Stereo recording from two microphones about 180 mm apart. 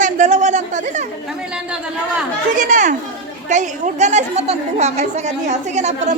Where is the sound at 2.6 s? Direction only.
45° right (ahead or behind).